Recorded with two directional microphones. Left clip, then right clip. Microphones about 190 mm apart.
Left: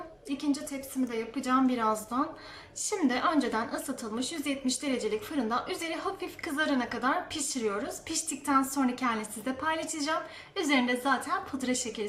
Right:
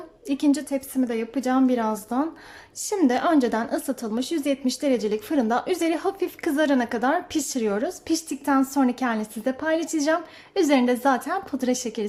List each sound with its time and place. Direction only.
0.3 s a woman's voice: 35° right (ahead or behind)